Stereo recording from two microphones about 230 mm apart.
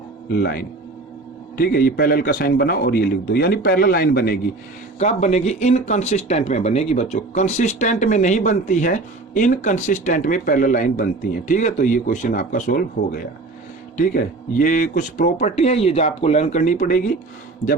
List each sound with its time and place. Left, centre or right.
0.3 s a man's voice: left
4.9 s speech: left